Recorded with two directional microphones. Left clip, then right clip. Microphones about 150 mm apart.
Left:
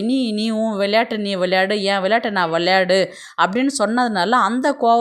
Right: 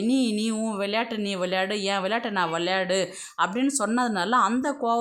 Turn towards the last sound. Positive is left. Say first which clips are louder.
# left 8 dB
turn(degrees=30)  # may be behind; listen again after turning